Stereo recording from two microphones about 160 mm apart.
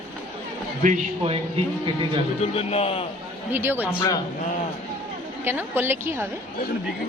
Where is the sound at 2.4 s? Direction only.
40° left (ahead or behind).